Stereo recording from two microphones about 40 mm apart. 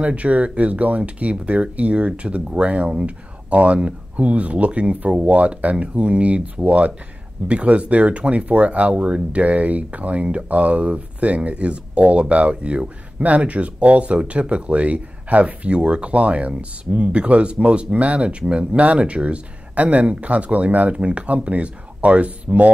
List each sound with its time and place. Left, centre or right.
0.0 s speech: right